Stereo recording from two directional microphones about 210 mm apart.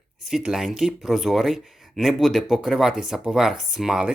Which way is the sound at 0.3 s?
Centre (ahead or behind).